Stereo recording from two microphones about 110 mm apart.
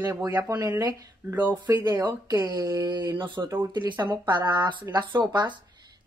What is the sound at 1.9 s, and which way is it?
Speech, 35° right (ahead or behind).